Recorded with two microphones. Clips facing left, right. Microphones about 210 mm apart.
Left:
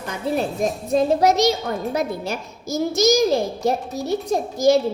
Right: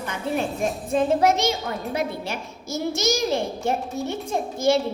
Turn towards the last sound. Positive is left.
turn(degrees=40)  # may be behind; listen again after turning